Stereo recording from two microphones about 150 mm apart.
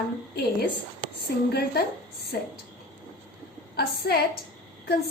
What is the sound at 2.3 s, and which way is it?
Speech, 90° left.